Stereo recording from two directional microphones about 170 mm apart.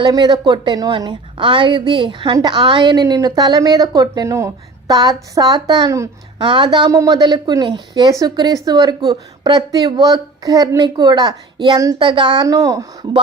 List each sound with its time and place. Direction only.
0.0 s a woman's voice: 25° right (ahead or behind)